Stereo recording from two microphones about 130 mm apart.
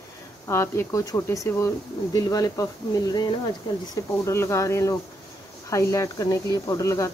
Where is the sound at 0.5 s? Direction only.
20° left (ahead or behind).